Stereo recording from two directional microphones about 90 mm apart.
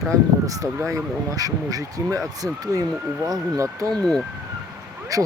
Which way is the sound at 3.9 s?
5° left (ahead or behind).